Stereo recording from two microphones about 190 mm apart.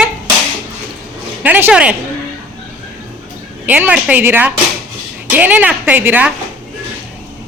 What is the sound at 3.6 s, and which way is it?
A woman's voice, 10° right (ahead or behind).